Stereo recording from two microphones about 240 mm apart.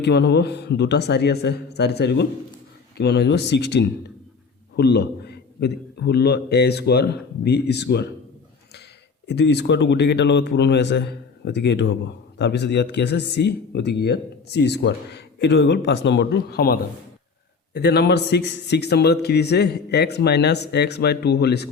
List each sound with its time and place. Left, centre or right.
0.0 s speech: left
9.2 s speech: left